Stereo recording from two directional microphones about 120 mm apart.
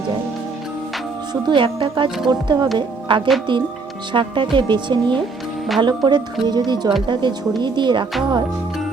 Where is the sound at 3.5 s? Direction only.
40° right (ahead or behind).